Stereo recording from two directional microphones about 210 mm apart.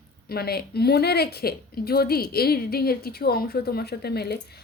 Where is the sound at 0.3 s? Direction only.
50° left (ahead or behind).